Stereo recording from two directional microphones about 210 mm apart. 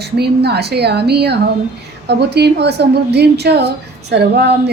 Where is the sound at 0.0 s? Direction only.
50° right (ahead or behind).